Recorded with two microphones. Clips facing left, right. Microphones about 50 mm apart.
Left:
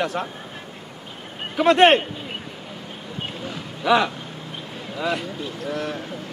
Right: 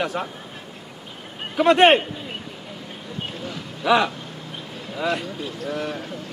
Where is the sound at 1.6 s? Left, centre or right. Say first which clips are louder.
Even; centre.